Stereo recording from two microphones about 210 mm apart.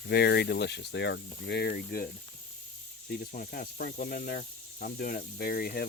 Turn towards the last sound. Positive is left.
turn(degrees=45)  # may be behind; listen again after turning